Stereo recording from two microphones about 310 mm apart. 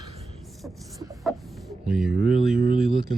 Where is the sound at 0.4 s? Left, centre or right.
Centre.